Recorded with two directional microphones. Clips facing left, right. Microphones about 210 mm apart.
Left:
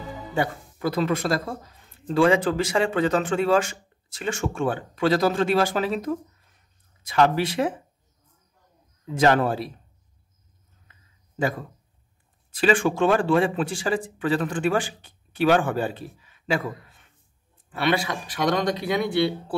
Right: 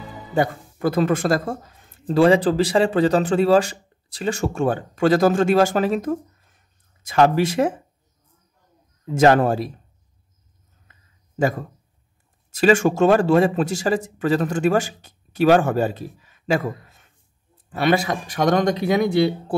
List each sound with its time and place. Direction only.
0.3 s speech: 45° right (ahead or behind)
9.0 s speech: 45° right (ahead or behind)
12.4 s speech: 45° right (ahead or behind)